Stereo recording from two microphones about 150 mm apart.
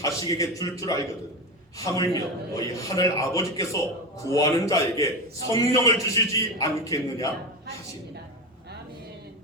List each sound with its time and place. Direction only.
0.0 s a man's voice: 25° left (ahead or behind)